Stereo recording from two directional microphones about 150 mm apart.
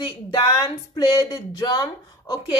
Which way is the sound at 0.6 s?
25° left (ahead or behind).